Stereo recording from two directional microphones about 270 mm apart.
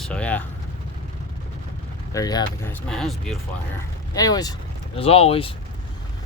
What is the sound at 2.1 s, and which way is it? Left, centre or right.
Speech, centre.